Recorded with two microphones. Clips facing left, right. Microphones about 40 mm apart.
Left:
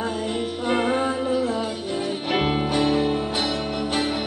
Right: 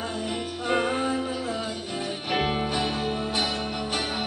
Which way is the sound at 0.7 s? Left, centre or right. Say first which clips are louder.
Left 2 dB; centre.